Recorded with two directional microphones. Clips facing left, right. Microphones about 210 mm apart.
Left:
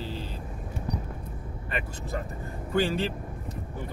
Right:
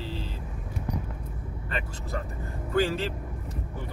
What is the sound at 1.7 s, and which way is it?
Speech, 15° left (ahead or behind).